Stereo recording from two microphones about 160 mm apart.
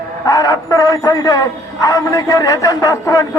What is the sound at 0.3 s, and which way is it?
A man's voice, 20° left (ahead or behind).